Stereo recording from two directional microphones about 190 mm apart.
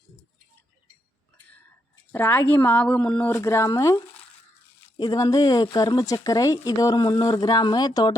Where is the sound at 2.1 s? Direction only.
10° left (ahead or behind).